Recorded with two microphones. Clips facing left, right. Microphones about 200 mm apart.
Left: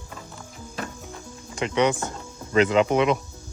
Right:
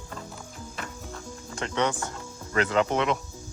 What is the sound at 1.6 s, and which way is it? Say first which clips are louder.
Speech: left 5 dB; 15° left (ahead or behind).